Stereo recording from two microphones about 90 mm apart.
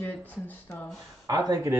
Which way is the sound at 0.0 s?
20° left (ahead or behind).